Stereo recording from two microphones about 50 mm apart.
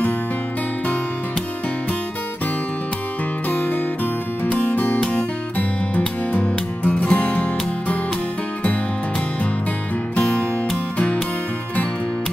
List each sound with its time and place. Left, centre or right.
3.4 s music: left
10.1 s music: centre